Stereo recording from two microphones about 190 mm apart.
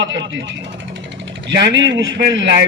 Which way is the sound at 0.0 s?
70° right (ahead or behind).